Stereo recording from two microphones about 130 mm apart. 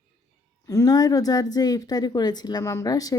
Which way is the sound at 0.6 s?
25° left (ahead or behind).